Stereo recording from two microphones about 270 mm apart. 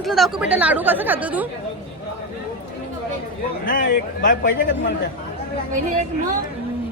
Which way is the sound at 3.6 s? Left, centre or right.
Left.